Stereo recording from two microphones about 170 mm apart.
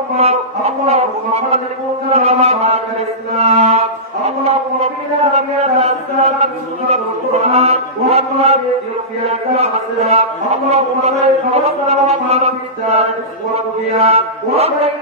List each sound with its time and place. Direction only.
0.2 s speech: 40° right (ahead or behind)
2.1 s music: 40° right (ahead or behind)
5.2 s chant: 40° right (ahead or behind)
9.3 s a sound: 35° right (ahead or behind)
12.3 s chant: 40° right (ahead or behind)
13.9 s mantra: 35° right (ahead or behind)